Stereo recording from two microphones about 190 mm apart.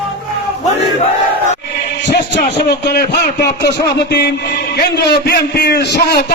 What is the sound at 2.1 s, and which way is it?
A man's voice, 65° left (ahead or behind).